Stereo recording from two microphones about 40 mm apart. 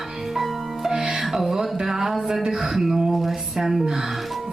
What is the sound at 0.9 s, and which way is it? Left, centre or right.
Music, centre.